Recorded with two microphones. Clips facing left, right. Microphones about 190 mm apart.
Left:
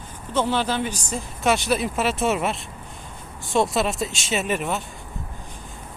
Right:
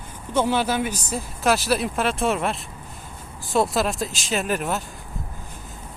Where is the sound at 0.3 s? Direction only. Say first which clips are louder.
Right 1 dB; 10° right (ahead or behind).